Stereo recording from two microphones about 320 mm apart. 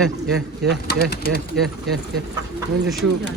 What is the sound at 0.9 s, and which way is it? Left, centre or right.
Speech, left.